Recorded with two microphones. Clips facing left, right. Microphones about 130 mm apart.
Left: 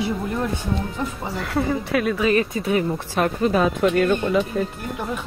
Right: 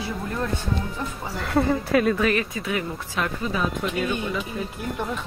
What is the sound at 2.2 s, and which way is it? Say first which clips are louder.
Speech: left 4 dB; 30° left (ahead or behind).